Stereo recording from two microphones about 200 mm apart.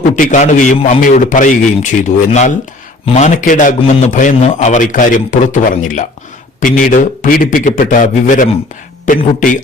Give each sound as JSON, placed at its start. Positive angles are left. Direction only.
{"t": 0.2, "sound": "a man's voice", "side_deg": 40}